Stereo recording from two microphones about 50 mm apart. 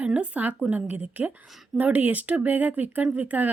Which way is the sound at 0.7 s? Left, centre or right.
Right.